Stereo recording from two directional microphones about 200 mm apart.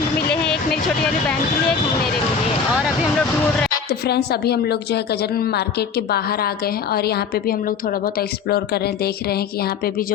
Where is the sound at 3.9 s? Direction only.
50° left (ahead or behind).